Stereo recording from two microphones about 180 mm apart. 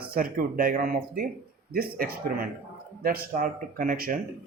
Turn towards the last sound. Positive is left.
turn(degrees=-50)  # may be behind; listen again after turning